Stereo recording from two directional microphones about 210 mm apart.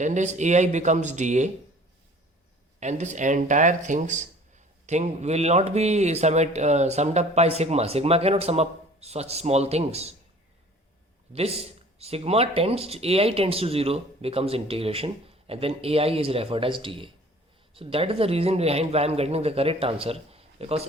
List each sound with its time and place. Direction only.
0.0 s speech: 35° right (ahead or behind)
2.8 s speech: 35° right (ahead or behind)
11.3 s speech: 30° right (ahead or behind)